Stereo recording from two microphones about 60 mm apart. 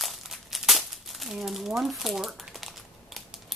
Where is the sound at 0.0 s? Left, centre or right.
Centre.